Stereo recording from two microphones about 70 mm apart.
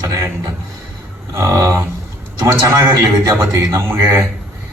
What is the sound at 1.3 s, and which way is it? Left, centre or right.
Speech, right.